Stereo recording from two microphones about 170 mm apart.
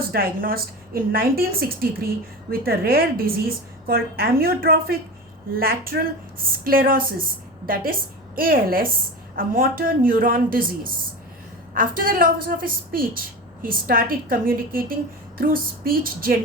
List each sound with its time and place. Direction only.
0.0 s a woman's voice: 60° right (ahead or behind)
8.4 s a woman's voice: 60° right (ahead or behind)